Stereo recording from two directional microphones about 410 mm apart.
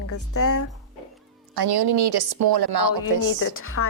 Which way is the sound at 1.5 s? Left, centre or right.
Right.